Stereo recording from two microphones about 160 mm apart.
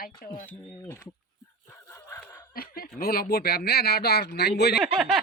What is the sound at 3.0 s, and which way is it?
Speech, 70° left (ahead or behind).